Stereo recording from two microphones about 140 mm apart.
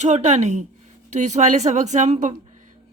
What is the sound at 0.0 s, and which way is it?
A woman's voice, 55° right (ahead or behind).